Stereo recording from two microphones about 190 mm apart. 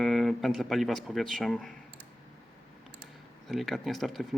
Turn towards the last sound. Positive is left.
turn(degrees=0)  # may be behind; listen again after turning